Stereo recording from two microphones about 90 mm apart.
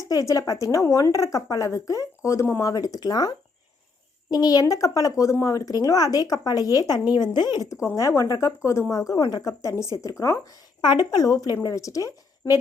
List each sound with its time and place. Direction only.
0.0 s speech: 40° left (ahead or behind)
10.8 s speech: 50° left (ahead or behind)